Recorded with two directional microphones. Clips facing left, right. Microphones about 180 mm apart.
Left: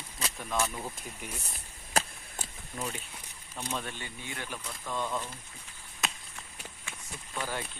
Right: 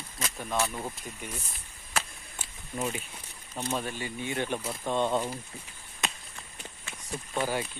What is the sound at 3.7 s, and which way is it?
Speech, 5° right (ahead or behind).